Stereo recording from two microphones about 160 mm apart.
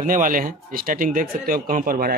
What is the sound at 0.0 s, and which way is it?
Speech, 55° right (ahead or behind).